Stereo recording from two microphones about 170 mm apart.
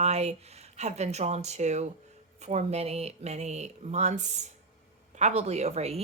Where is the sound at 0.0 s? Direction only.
40° right (ahead or behind).